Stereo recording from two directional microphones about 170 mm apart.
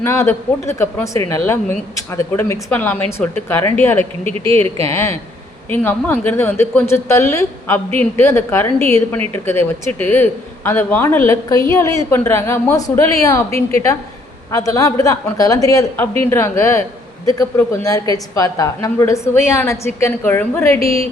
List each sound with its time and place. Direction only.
0.0 s a woman's voice: 15° left (ahead or behind)
4.4 s speech: 35° right (ahead or behind)
4.9 s a woman's voice: 15° left (ahead or behind)
20.7 s speech: 35° right (ahead or behind)